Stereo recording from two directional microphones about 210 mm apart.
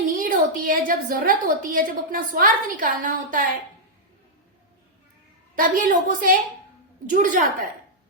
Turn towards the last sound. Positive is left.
turn(degrees=-40)  # may be behind; listen again after turning